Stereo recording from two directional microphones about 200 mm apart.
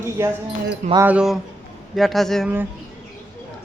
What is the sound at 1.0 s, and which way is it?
A woman's voice, 5° right (ahead or behind).